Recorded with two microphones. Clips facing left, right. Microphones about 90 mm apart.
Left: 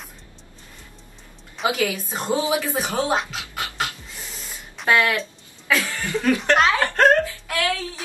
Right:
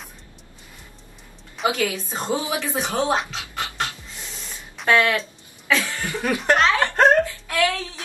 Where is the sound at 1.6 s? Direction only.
5° left (ahead or behind).